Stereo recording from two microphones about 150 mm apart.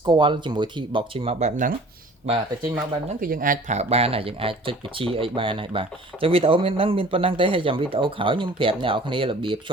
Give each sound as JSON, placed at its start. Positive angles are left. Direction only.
{"t": 0.0, "sound": "speech", "side_deg": -30}
{"t": 3.2, "sound": "speech", "side_deg": -70}
{"t": 3.8, "sound": "speech", "side_deg": -45}